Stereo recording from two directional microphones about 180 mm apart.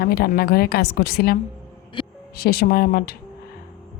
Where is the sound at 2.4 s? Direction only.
60° left (ahead or behind).